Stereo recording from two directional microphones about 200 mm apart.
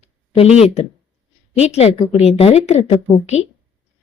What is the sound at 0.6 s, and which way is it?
A woman's voice, 30° left (ahead or behind).